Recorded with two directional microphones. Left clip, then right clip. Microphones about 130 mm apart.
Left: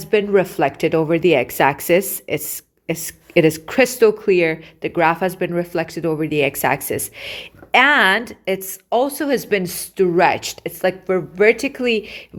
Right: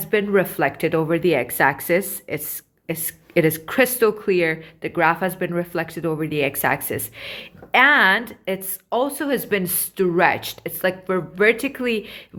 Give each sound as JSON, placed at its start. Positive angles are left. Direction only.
{"t": 0.0, "sound": "speech", "side_deg": 45}